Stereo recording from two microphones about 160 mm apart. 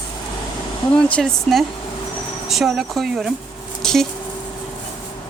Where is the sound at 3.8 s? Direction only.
5° left (ahead or behind).